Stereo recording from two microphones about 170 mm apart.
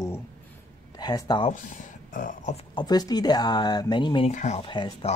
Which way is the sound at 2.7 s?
20° left (ahead or behind).